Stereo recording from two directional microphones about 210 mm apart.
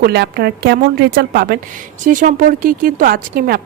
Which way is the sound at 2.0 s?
40° right (ahead or behind).